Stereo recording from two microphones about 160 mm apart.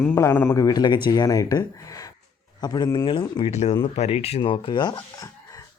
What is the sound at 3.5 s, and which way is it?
Speech, 45° left (ahead or behind).